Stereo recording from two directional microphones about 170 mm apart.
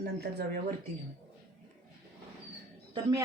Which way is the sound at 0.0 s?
70° right (ahead or behind).